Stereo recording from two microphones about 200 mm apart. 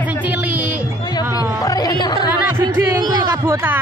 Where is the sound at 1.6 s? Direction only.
20° left (ahead or behind).